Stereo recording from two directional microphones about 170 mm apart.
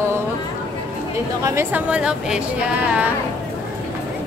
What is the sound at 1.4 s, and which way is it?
Speech, 15° right (ahead or behind).